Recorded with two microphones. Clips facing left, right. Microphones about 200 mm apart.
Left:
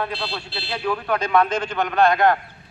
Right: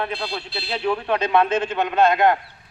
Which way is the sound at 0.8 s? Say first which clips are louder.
Right 1 dB; 25° right (ahead or behind).